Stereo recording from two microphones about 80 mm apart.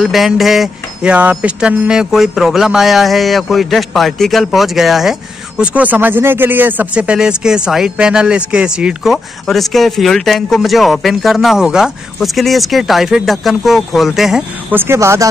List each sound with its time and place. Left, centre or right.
0.0 s speech: centre
1.0 s speech: centre
5.6 s speech: centre
14.7 s speech: right
15.0 s speech: right